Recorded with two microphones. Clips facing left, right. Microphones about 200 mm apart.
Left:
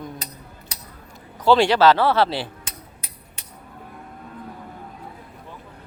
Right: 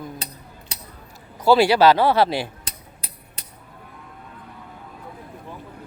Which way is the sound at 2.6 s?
35° right (ahead or behind).